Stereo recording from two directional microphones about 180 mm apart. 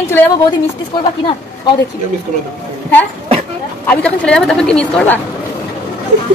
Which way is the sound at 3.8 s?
10° left (ahead or behind).